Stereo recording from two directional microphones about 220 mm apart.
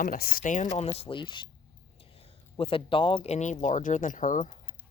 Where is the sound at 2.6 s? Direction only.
25° left (ahead or behind).